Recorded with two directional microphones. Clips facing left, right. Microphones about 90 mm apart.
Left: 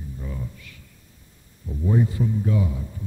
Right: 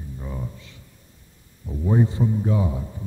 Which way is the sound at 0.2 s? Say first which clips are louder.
Right 2 dB; 25° right (ahead or behind).